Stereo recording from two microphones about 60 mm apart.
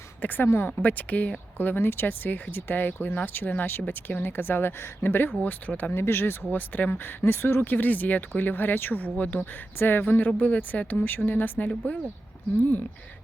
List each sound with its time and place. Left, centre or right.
0.2 s speech: left
6.5 s speech: left